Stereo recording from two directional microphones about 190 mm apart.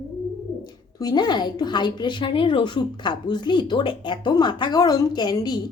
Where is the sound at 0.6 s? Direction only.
20° left (ahead or behind).